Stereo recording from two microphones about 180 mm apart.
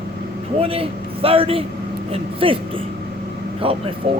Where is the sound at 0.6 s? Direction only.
30° right (ahead or behind).